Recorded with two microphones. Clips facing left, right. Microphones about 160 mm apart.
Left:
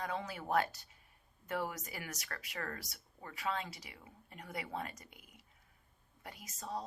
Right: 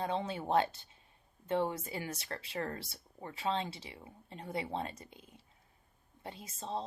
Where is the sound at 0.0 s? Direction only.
25° right (ahead or behind).